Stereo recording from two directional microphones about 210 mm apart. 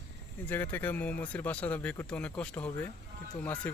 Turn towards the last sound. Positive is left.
turn(degrees=5)  # may be behind; listen again after turning